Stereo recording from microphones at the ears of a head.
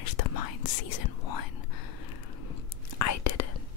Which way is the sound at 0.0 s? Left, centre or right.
Left.